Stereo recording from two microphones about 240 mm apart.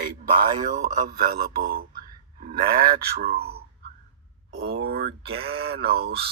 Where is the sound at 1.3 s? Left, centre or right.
Right.